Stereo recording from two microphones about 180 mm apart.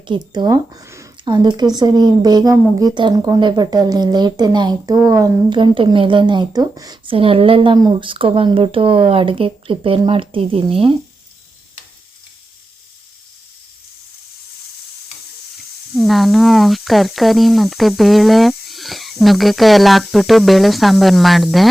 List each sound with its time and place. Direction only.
0.0 s a woman's voice: 25° right (ahead or behind)
15.5 s speech: centre (ahead or behind)